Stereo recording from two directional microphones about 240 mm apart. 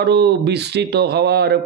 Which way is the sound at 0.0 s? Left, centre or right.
Right.